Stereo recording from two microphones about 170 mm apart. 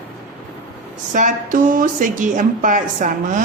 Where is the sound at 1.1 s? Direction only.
50° right (ahead or behind).